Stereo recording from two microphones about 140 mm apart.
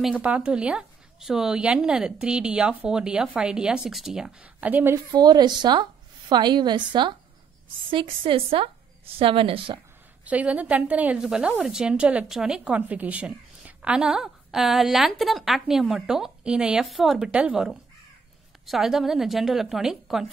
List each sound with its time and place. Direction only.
0.2 s a woman's voice: 10° right (ahead or behind)
4.9 s a woman's voice: 30° right (ahead or behind)
10.2 s a woman's voice: 10° right (ahead or behind)